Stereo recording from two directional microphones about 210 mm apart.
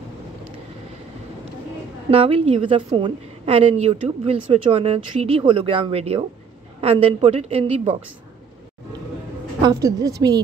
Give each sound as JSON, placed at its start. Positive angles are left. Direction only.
{"t": 2.0, "sound": "a woman's voice", "side_deg": -25}
{"t": 9.6, "sound": "a woman's voice", "side_deg": -15}